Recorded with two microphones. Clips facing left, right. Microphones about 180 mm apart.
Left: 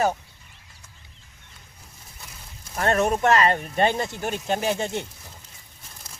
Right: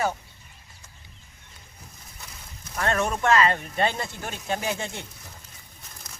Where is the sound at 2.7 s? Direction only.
30° left (ahead or behind).